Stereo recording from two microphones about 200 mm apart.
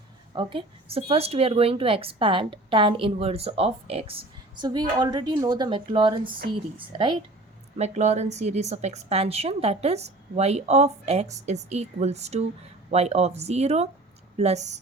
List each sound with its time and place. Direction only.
0.3 s a woman's voice: 25° right (ahead or behind)
7.8 s a woman's voice: 35° right (ahead or behind)